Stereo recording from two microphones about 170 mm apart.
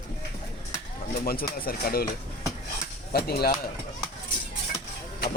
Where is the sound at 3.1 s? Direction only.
65° left (ahead or behind).